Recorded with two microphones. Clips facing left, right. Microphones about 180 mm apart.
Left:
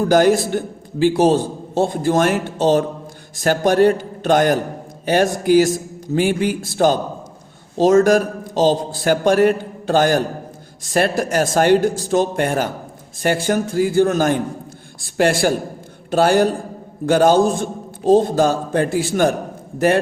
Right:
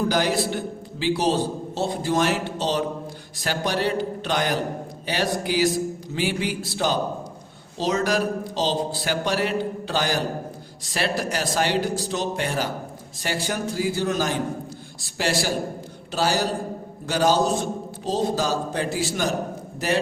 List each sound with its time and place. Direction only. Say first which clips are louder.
0.0 s a man's voice: left 8 dB; 50° left (ahead or behind)